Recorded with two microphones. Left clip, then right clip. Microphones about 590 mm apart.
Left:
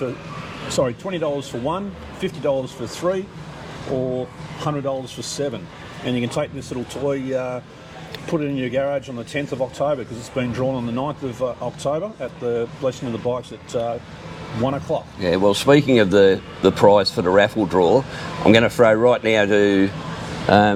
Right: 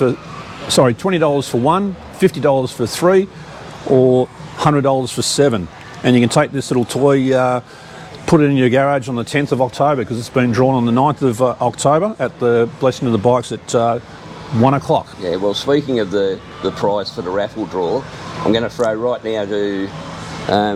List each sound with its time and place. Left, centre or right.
0.8 s speech: right
4.6 s speech: right
6.1 s speech: right
15.2 s speech: centre